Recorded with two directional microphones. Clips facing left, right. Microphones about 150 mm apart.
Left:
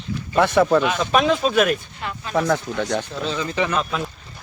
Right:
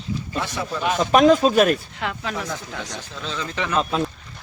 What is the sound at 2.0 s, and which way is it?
Speech, 90° right.